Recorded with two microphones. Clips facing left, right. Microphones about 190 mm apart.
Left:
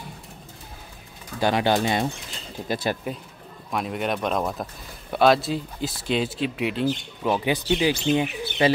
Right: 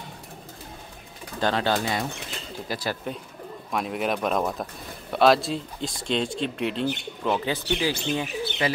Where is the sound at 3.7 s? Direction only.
Centre (ahead or behind).